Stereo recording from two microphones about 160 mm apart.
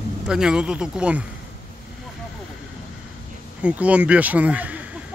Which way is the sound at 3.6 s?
10° right (ahead or behind).